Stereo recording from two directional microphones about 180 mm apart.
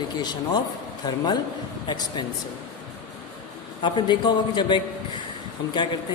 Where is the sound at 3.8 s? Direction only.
25° left (ahead or behind).